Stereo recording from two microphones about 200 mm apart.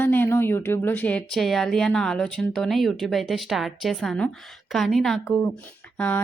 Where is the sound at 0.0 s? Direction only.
10° left (ahead or behind).